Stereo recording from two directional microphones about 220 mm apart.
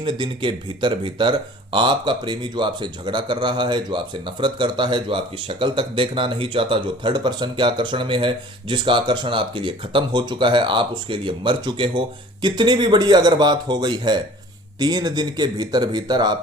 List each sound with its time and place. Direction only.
0.0 s speech: 20° right (ahead or behind)